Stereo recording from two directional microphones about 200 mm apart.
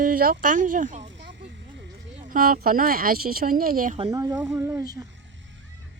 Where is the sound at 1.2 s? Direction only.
60° right (ahead or behind).